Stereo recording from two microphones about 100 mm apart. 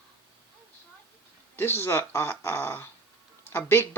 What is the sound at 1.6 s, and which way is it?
Speech, 25° left (ahead or behind).